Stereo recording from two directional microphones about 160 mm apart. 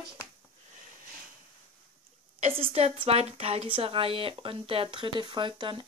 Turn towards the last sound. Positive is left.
turn(degrees=-30)  # may be behind; listen again after turning